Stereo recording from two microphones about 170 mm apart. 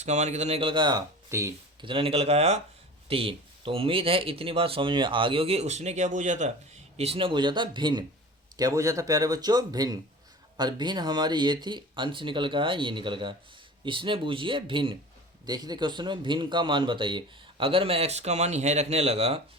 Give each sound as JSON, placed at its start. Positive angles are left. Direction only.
{"t": 0.0, "sound": "speech", "side_deg": -45}
{"t": 1.8, "sound": "speech", "side_deg": -30}